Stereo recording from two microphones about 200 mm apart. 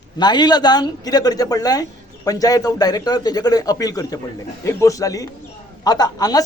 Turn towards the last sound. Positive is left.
turn(degrees=20)  # may be behind; listen again after turning